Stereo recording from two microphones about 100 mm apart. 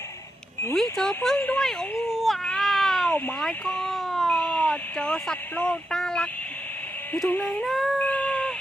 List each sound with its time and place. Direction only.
0.7 s speech: 5° left (ahead or behind)
1.4 s speech: 15° left (ahead or behind)
1.6 s a sound: centre (ahead or behind)
3.4 s speech: 5° left (ahead or behind)
7.3 s speech: 15° left (ahead or behind)
8.0 s a sound: 10° left (ahead or behind)